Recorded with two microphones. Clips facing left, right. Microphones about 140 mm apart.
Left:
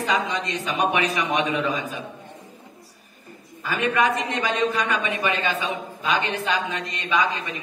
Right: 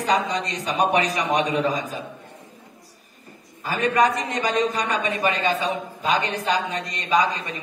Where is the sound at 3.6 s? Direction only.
40° right (ahead or behind).